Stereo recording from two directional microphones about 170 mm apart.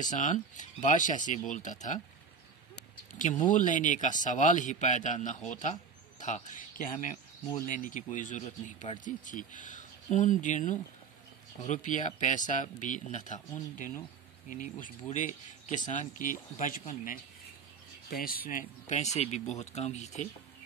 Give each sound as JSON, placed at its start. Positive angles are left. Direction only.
{"t": 0.1, "sound": "speech", "side_deg": 45}
{"t": 3.2, "sound": "speech", "side_deg": 45}